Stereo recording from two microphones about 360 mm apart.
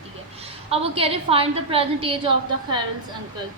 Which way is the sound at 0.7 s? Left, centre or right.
Centre.